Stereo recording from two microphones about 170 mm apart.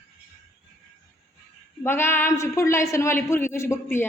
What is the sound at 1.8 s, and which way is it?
A woman's voice, 15° left (ahead or behind).